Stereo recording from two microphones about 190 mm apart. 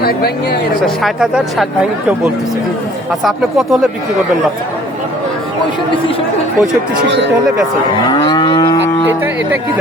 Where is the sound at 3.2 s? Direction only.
Centre (ahead or behind).